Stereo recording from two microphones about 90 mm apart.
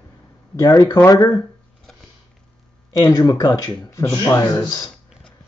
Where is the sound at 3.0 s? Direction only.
45° left (ahead or behind).